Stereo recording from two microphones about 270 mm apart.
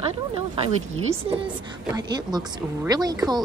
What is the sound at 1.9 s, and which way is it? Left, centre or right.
A woman's voice, centre.